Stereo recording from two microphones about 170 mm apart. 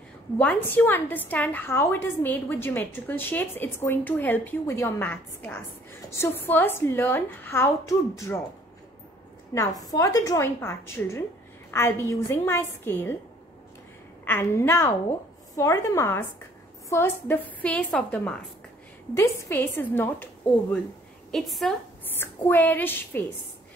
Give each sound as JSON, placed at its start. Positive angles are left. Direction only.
{"t": 0.4, "sound": "a woman's voice", "side_deg": 10}
{"t": 9.5, "sound": "a woman's voice", "side_deg": 20}
{"t": 14.2, "sound": "a woman's voice", "side_deg": 15}
{"t": 21.3, "sound": "a woman's voice", "side_deg": 0}